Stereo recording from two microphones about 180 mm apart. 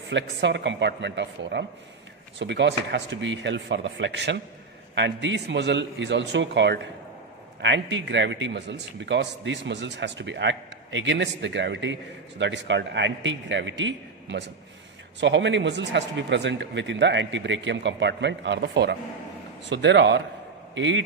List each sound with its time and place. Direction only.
0.1 s a man's voice: 85° right
20.7 s a man's voice: 90° right